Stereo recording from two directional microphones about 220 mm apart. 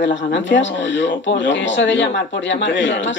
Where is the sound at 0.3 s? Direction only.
55° left (ahead or behind).